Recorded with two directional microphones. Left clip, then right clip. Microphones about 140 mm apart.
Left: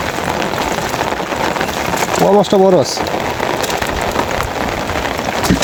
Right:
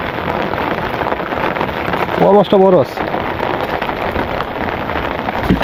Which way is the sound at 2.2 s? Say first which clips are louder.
Right 1 dB; 15° left (ahead or behind).